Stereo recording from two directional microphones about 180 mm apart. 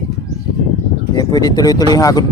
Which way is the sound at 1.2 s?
20° left (ahead or behind).